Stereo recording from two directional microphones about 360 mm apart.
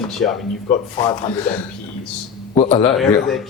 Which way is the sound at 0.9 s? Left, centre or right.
Centre.